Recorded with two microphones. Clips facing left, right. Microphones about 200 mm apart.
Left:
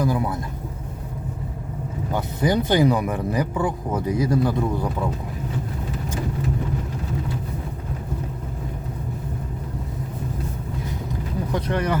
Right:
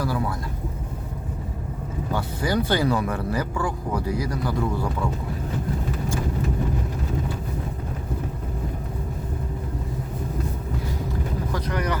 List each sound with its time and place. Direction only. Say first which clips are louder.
0.0 s speech: left 3 dB; 20° left (ahead or behind)
2.1 s speech: left 3 dB; 20° left (ahead or behind)
11.5 s speech: left 4 dB; 25° left (ahead or behind)